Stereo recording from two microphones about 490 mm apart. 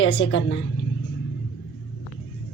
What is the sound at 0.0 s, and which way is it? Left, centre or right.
Speech, left.